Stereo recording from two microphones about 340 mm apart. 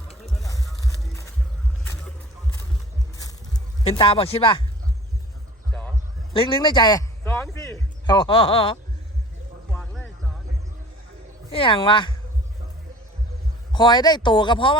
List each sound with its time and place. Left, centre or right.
0.3 s music: centre
1.8 s a sound: centre
3.8 s speech: centre
6.3 s a man's voice: centre
9.7 s music: centre
11.5 s speech: centre
13.7 s speech: centre